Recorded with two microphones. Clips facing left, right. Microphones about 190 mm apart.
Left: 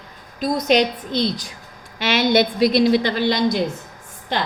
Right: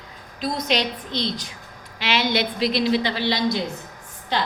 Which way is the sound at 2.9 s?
50° left (ahead or behind).